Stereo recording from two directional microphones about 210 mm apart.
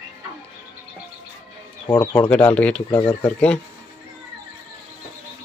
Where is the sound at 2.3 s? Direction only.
5° left (ahead or behind).